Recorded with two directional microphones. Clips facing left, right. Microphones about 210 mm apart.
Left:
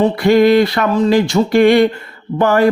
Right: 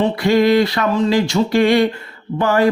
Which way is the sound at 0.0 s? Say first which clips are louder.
Left 4 dB; 55° left (ahead or behind).